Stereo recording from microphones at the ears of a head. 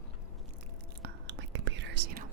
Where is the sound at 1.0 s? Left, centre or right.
Right.